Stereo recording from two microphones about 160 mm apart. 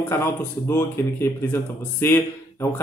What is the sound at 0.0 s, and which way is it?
Speech, 15° left (ahead or behind).